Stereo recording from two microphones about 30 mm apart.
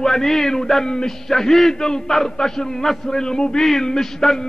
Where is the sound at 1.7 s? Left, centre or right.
Left.